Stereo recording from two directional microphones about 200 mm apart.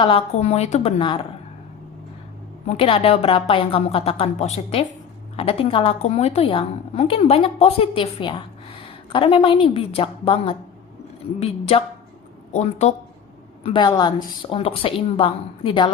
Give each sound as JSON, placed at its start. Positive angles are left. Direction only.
{"t": 0.0, "sound": "a woman's voice", "side_deg": 30}
{"t": 2.6, "sound": "a woman's voice", "side_deg": 30}
{"t": 13.7, "sound": "a woman's voice", "side_deg": 20}